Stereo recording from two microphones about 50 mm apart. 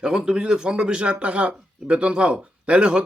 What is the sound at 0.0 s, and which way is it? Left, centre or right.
Speech, centre.